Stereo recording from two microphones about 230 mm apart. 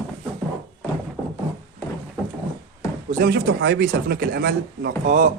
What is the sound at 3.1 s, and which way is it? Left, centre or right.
Speech, right.